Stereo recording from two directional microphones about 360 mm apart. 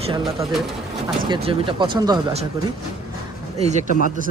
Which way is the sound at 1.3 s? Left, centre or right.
Centre.